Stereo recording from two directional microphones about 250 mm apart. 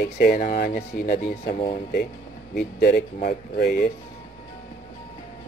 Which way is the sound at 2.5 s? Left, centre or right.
Left.